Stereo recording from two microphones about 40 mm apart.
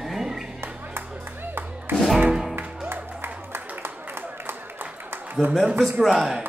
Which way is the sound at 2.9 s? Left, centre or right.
Right.